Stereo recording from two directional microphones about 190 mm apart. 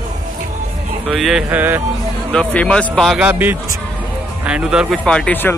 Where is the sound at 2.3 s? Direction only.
5° left (ahead or behind).